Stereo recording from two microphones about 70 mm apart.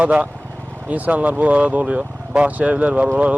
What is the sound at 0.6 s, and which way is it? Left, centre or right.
Speech, right.